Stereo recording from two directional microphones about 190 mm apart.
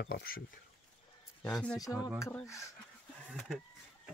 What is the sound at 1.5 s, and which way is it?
Speech, centre (ahead or behind).